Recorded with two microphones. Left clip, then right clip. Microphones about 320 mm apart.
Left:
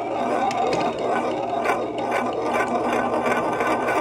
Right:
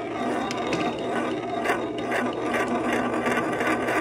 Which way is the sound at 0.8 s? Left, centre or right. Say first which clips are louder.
Left 4 dB; centre.